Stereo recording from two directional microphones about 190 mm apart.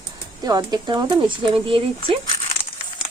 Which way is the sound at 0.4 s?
20° right (ahead or behind).